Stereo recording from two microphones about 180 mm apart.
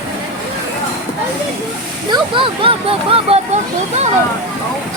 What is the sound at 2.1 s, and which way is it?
Speech, 30° right (ahead or behind).